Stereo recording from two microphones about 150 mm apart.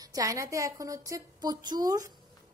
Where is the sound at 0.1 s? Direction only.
20° right (ahead or behind).